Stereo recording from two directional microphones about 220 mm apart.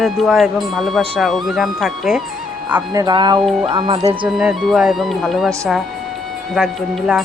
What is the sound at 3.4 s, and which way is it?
Speech, centre (ahead or behind).